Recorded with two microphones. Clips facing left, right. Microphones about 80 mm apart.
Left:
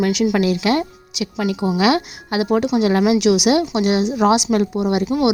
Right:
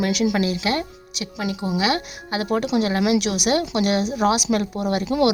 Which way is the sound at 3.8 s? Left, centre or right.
Right.